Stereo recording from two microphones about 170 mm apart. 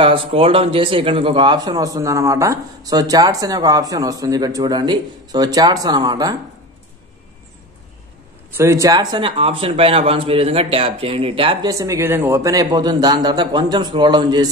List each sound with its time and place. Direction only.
0.0 s a man's voice: 30° right (ahead or behind)
8.5 s speech: 15° right (ahead or behind); by 11.7 s 30° right (ahead or behind)
11.7 s a man's voice: 20° right (ahead or behind)